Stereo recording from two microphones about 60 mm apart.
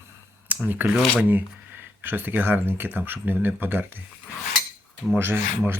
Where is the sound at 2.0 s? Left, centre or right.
Right.